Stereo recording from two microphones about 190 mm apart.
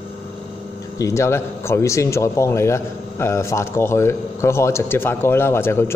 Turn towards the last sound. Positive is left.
turn(degrees=15)  # may be behind; listen again after turning